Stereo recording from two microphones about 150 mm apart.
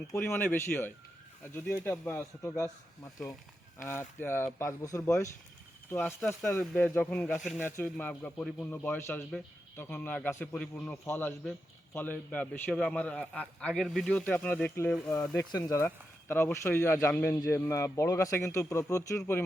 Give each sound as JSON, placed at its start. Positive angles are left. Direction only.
{"t": 0.1, "sound": "a man's voice", "side_deg": 15}